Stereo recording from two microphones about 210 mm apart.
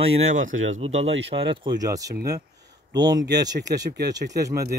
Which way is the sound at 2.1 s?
50° right (ahead or behind).